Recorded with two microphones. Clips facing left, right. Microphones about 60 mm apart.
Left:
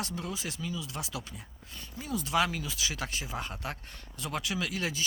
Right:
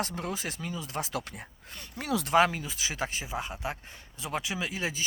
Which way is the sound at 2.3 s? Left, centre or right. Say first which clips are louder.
Right 5 dB; right.